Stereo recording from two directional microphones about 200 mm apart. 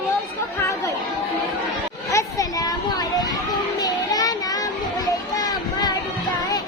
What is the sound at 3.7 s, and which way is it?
Child singing, 20° left (ahead or behind).